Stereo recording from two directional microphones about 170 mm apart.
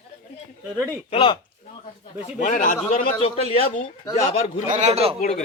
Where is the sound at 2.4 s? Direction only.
50° left (ahead or behind).